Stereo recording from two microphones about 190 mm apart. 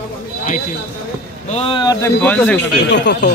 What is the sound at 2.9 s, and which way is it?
Speech, 65° left (ahead or behind).